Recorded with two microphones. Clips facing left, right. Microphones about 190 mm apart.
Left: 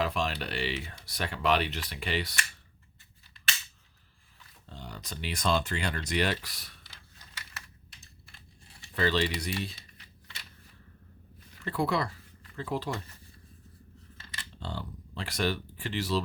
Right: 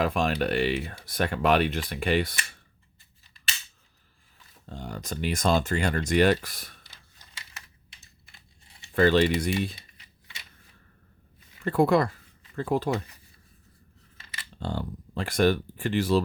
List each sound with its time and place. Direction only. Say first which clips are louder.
0.0 s speech: right 6 dB; 50° right (ahead or behind)
4.6 s speech: right 7 dB; 45° right (ahead or behind)
9.0 s speech: right 8 dB; 50° right (ahead or behind)
11.6 s speech: right 8 dB; 50° right (ahead or behind)
14.6 s speech: right 7 dB; 50° right (ahead or behind)